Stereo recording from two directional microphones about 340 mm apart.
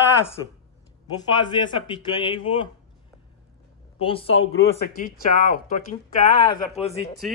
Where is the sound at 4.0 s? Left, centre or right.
Centre.